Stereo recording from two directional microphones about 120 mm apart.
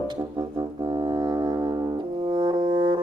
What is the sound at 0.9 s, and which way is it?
Music, 40° right (ahead or behind).